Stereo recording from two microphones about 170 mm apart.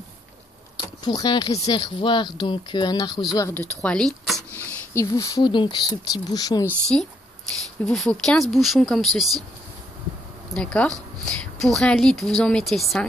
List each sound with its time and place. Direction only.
0.7 s speech: 25° left (ahead or behind)
3.8 s speech: 5° left (ahead or behind)
4.9 s speech: 20° left (ahead or behind)
6.9 s speech: 5° left (ahead or behind)
10.5 s speech: 5° left (ahead or behind)